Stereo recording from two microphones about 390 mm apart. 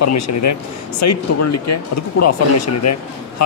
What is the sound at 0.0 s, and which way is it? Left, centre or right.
Speech, left.